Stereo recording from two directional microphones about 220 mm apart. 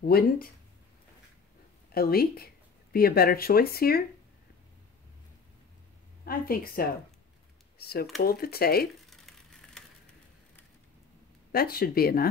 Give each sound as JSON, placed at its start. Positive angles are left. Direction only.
{"t": 0.0, "sound": "speech", "side_deg": 45}
{"t": 2.0, "sound": "speech", "side_deg": 45}
{"t": 6.2, "sound": "a woman's voice", "side_deg": 40}
{"t": 9.1, "sound": "a sound", "side_deg": 0}
{"t": 11.5, "sound": "speech", "side_deg": 45}